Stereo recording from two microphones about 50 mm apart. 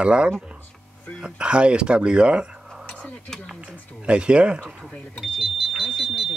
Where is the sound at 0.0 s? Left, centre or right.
Right.